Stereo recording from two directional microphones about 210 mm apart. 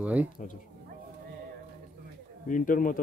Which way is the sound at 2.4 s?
40° left (ahead or behind).